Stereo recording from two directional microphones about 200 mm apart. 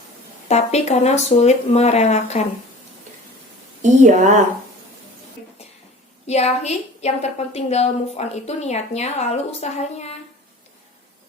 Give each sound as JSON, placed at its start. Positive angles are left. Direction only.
{"t": 0.4, "sound": "a woman's voice", "side_deg": 35}
{"t": 3.8, "sound": "speech", "side_deg": -35}
{"t": 6.2, "sound": "a woman's voice", "side_deg": 30}